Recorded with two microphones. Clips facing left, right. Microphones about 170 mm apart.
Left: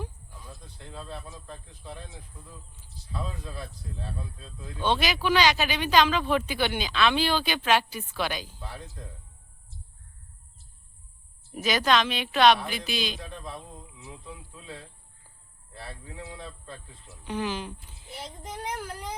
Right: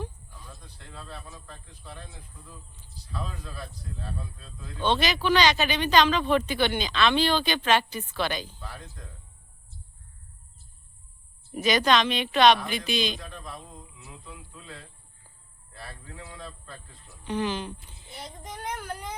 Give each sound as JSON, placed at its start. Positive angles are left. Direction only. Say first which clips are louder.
{"t": 0.9, "sound": "a man's voice", "louder": "left 3 dB", "side_deg": 20}
{"t": 3.1, "sound": "a man's voice", "louder": "left 1 dB", "side_deg": 25}
{"t": 4.8, "sound": "speech", "louder": "right 1 dB", "side_deg": 10}
{"t": 11.5, "sound": "a child's voice", "louder": "right 2 dB", "side_deg": 5}
{"t": 17.2, "sound": "a child's voice", "louder": "right 2 dB", "side_deg": 5}